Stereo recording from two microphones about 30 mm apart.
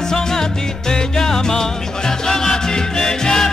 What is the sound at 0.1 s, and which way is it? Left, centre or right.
Music, left.